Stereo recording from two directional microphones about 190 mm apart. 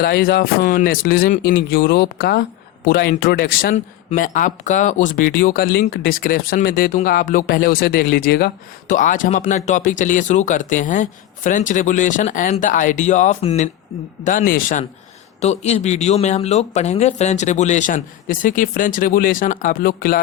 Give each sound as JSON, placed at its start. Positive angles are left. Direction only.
{"t": 0.0, "sound": "speech", "side_deg": 55}
{"t": 14.3, "sound": "speech", "side_deg": 45}